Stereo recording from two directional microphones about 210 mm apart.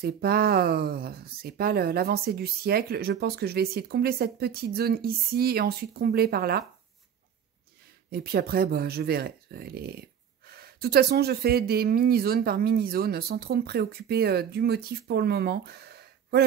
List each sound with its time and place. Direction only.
0.0 s speech: 45° right (ahead or behind)
8.1 s speech: 45° right (ahead or behind)